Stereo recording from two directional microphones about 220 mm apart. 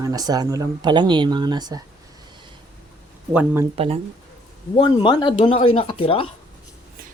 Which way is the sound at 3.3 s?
10° right (ahead or behind).